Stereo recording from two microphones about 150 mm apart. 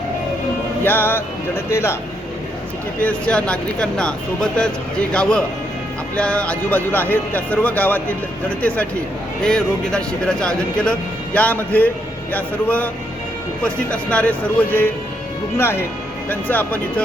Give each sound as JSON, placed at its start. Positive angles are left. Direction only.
{"t": 0.9, "sound": "speech", "side_deg": 15}
{"t": 3.0, "sound": "speech", "side_deg": 10}